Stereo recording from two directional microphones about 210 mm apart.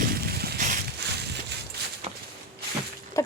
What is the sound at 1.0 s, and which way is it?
Crushing, 50° right (ahead or behind).